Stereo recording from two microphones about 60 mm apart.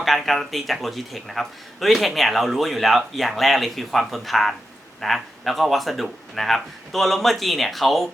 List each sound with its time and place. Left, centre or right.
0.0 s speech: centre